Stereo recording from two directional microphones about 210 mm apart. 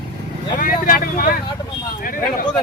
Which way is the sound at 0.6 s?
40° left (ahead or behind).